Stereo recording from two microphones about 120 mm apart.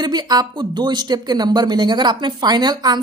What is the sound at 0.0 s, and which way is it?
Speech, 35° right (ahead or behind).